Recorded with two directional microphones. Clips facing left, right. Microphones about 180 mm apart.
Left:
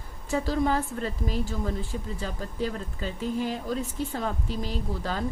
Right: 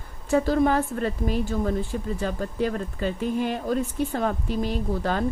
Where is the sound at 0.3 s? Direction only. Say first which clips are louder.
Right 5 dB; 55° right (ahead or behind).